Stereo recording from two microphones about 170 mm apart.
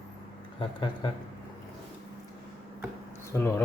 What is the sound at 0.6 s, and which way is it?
Speech, 30° left (ahead or behind).